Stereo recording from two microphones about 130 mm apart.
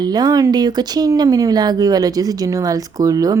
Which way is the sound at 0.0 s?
30° right (ahead or behind).